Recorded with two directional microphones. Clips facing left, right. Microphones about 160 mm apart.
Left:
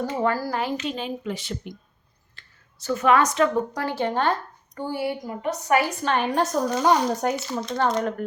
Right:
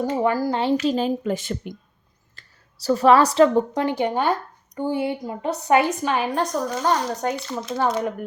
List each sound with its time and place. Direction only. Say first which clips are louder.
0.0 s speech: right 3 dB; 15° right (ahead or behind); by 1.7 s 50° right (ahead or behind)
2.3 s a woman's voice: right 1 dB; 35° right (ahead or behind)
6.0 s speech: even; 5° right (ahead or behind)
7.7 s speech: right 1 dB; 5° right (ahead or behind)